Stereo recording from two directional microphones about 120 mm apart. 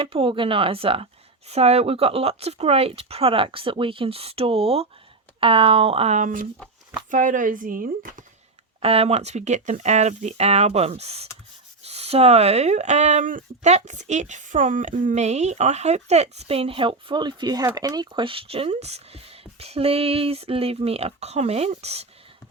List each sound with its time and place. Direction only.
0.1 s speech: 45° right (ahead or behind)
6.1 s speech: 90° right
8.8 s speech: 55° right (ahead or behind)